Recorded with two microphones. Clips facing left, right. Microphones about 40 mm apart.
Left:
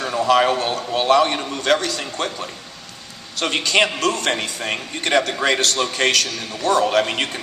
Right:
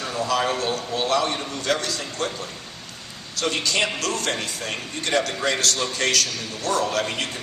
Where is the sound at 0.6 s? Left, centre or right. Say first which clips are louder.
Left 3 dB; left.